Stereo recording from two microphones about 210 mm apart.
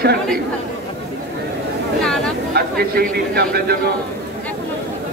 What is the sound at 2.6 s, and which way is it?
A man's voice, 45° right (ahead or behind).